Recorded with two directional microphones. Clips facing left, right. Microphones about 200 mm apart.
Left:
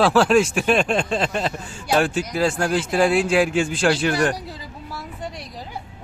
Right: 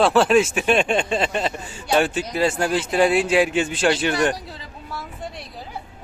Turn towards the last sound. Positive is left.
turn(degrees=0)  # may be behind; listen again after turning